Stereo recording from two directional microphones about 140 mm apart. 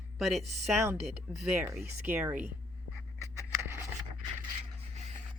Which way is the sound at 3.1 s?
20° right (ahead or behind).